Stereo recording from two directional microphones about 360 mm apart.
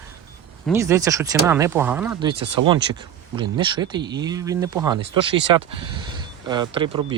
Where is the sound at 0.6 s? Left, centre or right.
Centre.